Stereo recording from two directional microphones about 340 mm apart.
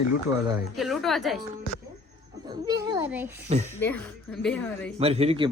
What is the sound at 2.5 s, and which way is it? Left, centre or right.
Speech, centre.